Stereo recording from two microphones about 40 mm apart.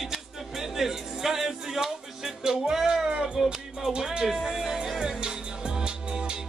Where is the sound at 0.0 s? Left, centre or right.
Centre.